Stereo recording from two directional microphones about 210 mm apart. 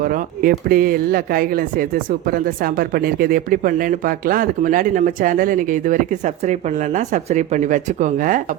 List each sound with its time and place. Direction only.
0.0 s speech: 40° right (ahead or behind)